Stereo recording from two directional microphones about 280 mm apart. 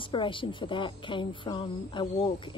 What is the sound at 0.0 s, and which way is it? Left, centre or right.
A woman's voice, centre.